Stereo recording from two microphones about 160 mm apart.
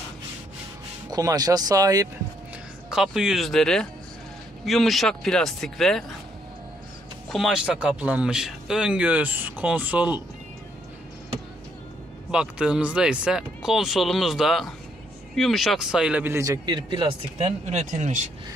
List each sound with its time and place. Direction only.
1.1 s speech: 25° right (ahead or behind)
2.9 s speech: 5° right (ahead or behind)
7.2 s speech: centre (ahead or behind)
12.3 s speech: 5° right (ahead or behind); by 17.6 s 30° right (ahead or behind)
17.6 s speech: 45° right (ahead or behind)